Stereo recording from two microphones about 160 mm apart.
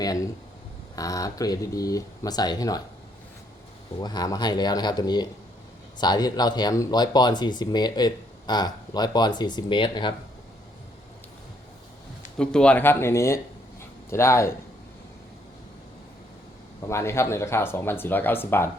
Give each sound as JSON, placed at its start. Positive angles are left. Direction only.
{"t": 0.0, "sound": "speech", "side_deg": 25}
{"t": 4.0, "sound": "speech", "side_deg": 25}
{"t": 12.4, "sound": "speech", "side_deg": 5}
{"t": 16.9, "sound": "speech", "side_deg": 15}